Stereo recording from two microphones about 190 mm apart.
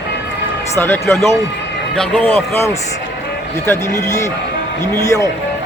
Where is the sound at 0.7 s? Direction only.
10° left (ahead or behind).